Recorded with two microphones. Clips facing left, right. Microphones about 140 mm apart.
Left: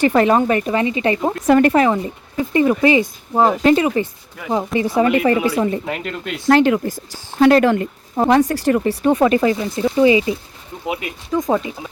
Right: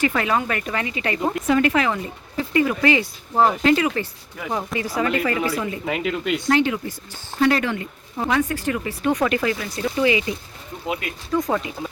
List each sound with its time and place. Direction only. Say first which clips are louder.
0.0 s speech: left 7 dB; 35° left (ahead or behind)
1.5 s speech: left 7 dB; 45° left (ahead or behind)
1.9 s speech: left 6 dB; 25° left (ahead or behind)
3.6 s speech: left 4 dB; 30° left (ahead or behind)
5.5 s speech: left 8 dB; 35° left (ahead or behind)
5.8 s speech: right 2 dB; centre (ahead or behind)
6.5 s speech: left 8 dB; 55° left (ahead or behind)
8.4 s speech: left 7 dB; 35° left (ahead or behind); by 11.7 s 20° left (ahead or behind)